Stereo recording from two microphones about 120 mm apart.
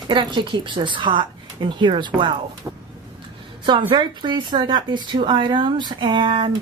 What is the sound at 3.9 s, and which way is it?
Speech, 40° right (ahead or behind).